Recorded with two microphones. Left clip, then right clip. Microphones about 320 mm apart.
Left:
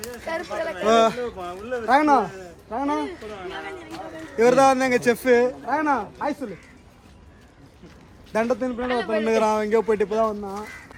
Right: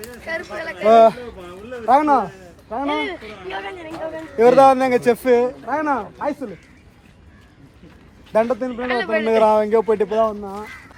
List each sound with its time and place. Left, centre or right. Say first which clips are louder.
0.3 s speech: right 1 dB; centre
0.9 s a man's voice: right 7 dB; centre
1.4 s speech: left 4 dB; centre
1.9 s a man's voice: right 3 dB; centre
8.3 s a man's voice: right 5 dB; centre